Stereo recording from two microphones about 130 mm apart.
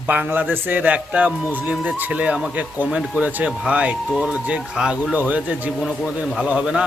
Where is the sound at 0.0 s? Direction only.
10° right (ahead or behind).